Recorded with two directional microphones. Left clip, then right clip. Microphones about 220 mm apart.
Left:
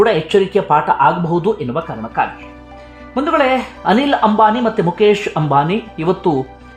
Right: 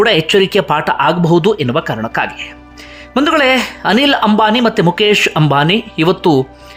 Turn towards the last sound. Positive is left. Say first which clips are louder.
# right 5 dB
turn(degrees=-10)  # may be behind; listen again after turning